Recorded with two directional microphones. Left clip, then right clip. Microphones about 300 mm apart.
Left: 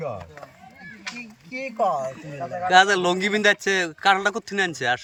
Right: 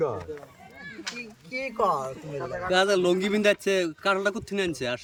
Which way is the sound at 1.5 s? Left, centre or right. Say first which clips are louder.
Left 2 dB; centre.